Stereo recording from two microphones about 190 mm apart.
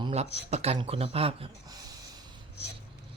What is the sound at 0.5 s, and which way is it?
Speech, 35° right (ahead or behind).